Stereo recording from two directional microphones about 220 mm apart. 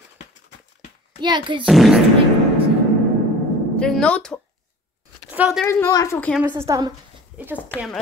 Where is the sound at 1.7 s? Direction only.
Centre (ahead or behind).